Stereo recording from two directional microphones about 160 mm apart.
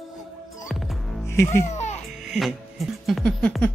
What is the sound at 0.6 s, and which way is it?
Music, centre (ahead or behind).